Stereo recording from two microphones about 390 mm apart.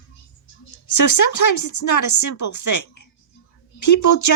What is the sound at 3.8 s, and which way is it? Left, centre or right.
Speech, left.